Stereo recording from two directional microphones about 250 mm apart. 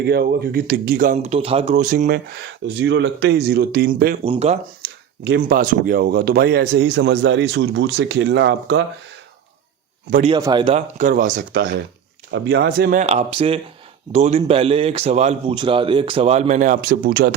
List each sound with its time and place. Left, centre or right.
0.0 s speech: right
4.2 s a man's voice: right
4.8 s speech: right
10.1 s speech: right
10.3 s a man's voice: centre; by 17.3 s right